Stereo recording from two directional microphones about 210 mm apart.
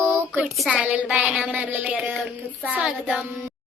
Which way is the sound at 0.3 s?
Centre (ahead or behind).